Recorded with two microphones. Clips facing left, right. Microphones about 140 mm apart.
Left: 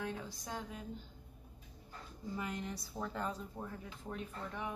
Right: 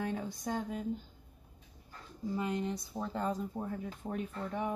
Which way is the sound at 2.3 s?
25° right (ahead or behind).